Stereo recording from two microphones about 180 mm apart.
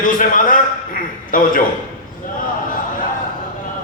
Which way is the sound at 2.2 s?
50° left (ahead or behind).